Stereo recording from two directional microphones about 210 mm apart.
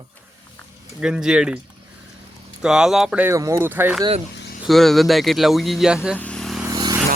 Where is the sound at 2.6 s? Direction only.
5° right (ahead or behind).